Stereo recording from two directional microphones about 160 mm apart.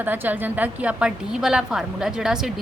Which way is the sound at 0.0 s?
10° right (ahead or behind).